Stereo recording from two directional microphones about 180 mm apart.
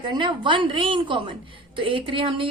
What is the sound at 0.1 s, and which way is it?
A woman's voice, 25° right (ahead or behind).